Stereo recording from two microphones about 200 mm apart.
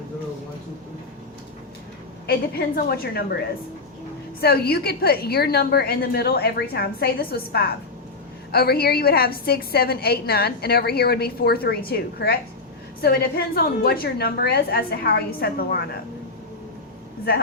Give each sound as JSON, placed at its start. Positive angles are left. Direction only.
{"t": 2.7, "sound": "a woman's voice", "side_deg": 50}
{"t": 4.4, "sound": "a woman's voice", "side_deg": 50}